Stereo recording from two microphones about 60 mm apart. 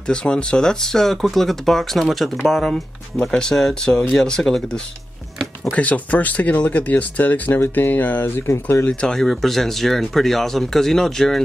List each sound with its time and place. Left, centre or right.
0.1 s speech: centre
5.7 s speech: left
8.8 s speech: centre